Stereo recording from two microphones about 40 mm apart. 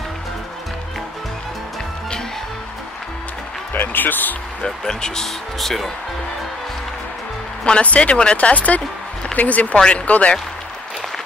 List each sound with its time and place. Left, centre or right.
3.7 s speech: left
4.6 s speech: centre
5.6 s speech: centre
7.6 s speech: left